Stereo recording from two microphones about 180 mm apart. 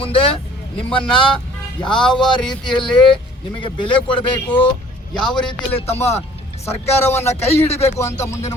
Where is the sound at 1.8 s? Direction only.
25° left (ahead or behind).